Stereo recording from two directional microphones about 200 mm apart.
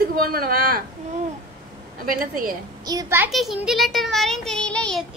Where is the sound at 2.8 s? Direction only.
20° right (ahead or behind).